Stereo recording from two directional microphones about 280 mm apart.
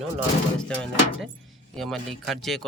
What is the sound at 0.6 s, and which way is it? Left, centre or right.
Speech, centre.